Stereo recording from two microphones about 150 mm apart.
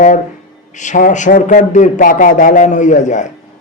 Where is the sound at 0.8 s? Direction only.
60° left (ahead or behind).